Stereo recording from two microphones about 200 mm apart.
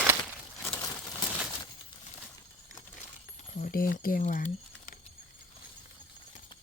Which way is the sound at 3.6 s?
45° left (ahead or behind).